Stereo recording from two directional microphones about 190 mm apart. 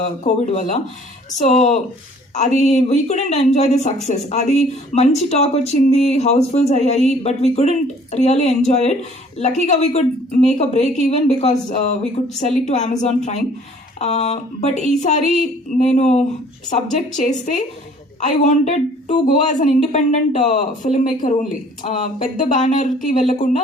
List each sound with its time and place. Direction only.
0.0 s speech: 35° left (ahead or behind)